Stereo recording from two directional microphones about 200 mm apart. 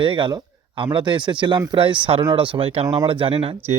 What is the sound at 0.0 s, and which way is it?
Speech, 25° right (ahead or behind).